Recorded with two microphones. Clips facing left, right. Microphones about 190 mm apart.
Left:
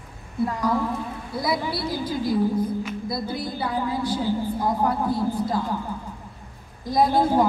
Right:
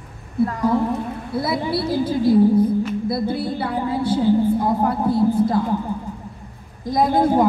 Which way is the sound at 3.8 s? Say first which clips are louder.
Right 6 dB; 25° right (ahead or behind).